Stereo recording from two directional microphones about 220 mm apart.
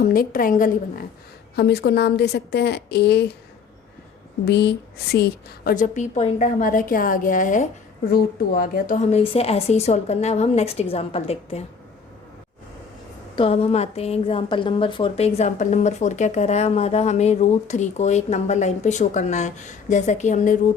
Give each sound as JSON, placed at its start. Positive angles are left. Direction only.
{"t": 0.0, "sound": "a woman's voice", "side_deg": 40}
{"t": 1.5, "sound": "a woman's voice", "side_deg": 50}
{"t": 4.4, "sound": "a woman's voice", "side_deg": 50}
{"t": 13.3, "sound": "a woman's voice", "side_deg": 25}